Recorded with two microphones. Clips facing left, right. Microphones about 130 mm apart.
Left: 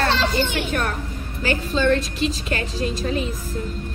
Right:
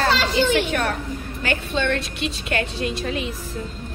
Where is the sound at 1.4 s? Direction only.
35° left (ahead or behind).